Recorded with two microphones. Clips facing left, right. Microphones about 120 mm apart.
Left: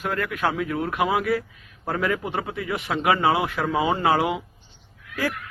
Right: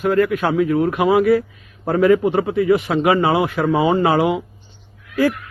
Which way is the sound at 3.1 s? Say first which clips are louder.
Right 4 dB; 15° right (ahead or behind).